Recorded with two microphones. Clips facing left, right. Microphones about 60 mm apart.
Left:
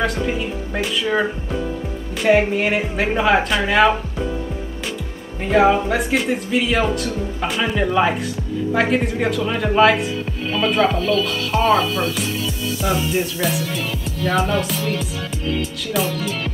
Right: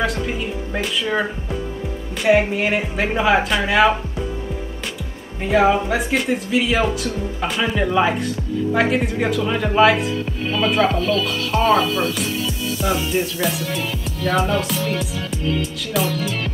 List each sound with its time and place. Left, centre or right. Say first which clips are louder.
0.0 s speech: left 1 dB; centre
5.4 s speech: left 1 dB; centre